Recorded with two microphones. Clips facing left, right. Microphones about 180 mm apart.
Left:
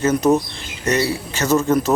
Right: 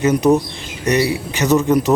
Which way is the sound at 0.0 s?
15° right (ahead or behind).